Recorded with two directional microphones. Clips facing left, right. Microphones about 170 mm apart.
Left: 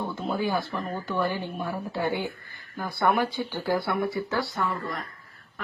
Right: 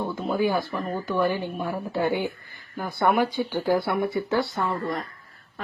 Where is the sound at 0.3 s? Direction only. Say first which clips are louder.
Right 4 dB; 15° right (ahead or behind).